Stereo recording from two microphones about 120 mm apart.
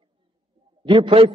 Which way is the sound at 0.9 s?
50° right (ahead or behind).